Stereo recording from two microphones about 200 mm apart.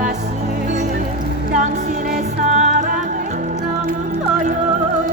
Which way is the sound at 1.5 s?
40° right (ahead or behind).